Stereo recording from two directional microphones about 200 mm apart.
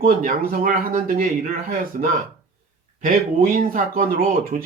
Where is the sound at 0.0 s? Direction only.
40° right (ahead or behind).